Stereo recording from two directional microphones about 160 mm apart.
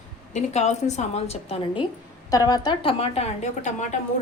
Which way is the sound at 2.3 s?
25° left (ahead or behind).